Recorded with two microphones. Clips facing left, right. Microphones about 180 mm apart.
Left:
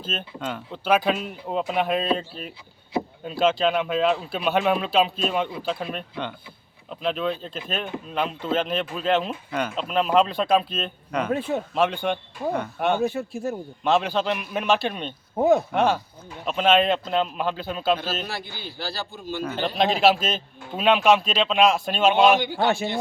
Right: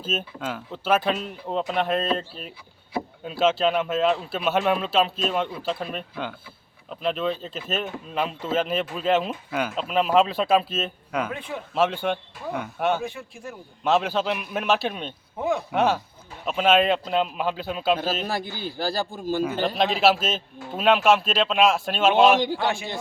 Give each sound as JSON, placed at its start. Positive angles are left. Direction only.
{"t": 0.0, "sound": "speech", "side_deg": -5}
{"t": 11.3, "sound": "speech", "side_deg": 40}
{"t": 11.7, "sound": "speech", "side_deg": 0}
{"t": 13.0, "sound": "speech", "side_deg": 40}
{"t": 13.8, "sound": "speech", "side_deg": -5}
{"t": 15.4, "sound": "speech", "side_deg": 40}
{"t": 15.7, "sound": "speech", "side_deg": -5}
{"t": 18.3, "sound": "speech", "side_deg": -45}
{"t": 19.4, "sound": "speech", "side_deg": -10}
{"t": 22.5, "sound": "speech", "side_deg": 40}